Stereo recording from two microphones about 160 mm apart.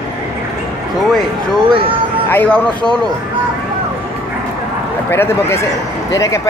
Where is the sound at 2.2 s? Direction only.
10° left (ahead or behind).